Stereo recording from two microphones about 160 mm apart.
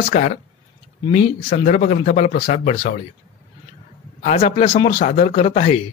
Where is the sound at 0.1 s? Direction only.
45° left (ahead or behind).